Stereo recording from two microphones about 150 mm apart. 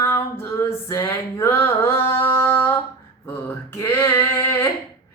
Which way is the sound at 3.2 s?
15° left (ahead or behind).